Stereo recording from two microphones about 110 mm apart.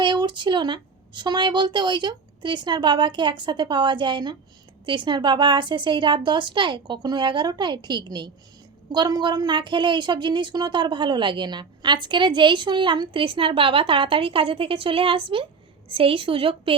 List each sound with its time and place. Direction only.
0.0 s a woman's voice: 45° right (ahead or behind)